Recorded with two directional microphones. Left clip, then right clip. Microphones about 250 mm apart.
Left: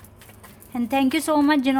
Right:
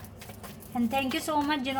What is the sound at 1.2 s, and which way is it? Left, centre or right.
Speech, left.